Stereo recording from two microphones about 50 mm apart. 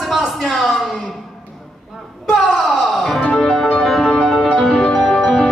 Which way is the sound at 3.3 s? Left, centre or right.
Centre.